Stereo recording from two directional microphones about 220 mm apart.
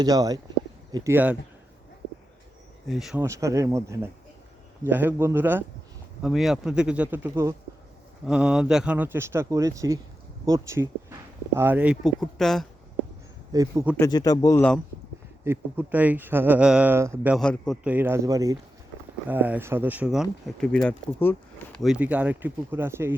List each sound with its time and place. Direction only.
0.0 s speech: 15° right (ahead or behind)
2.8 s speech: centre (ahead or behind)
3.2 s speech: 15° right (ahead or behind); by 12.6 s centre (ahead or behind)
13.5 s speech: 15° right (ahead or behind)
13.9 s speech: 15° left (ahead or behind)
15.4 s speech: 10° right (ahead or behind)
17.3 s speech: centre (ahead or behind)
17.9 s speech: 10° right (ahead or behind); by 21.3 s 5° left (ahead or behind)
21.8 s speech: 5° right (ahead or behind)